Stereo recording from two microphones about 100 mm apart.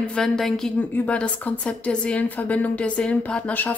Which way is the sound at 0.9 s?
15° left (ahead or behind).